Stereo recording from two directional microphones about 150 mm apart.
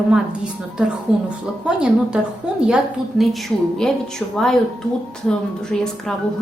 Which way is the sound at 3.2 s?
Centre (ahead or behind).